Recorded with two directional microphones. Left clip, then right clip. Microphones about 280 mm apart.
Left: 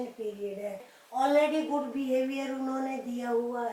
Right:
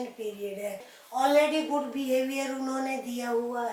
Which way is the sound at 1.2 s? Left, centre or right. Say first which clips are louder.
Right 2 dB; centre.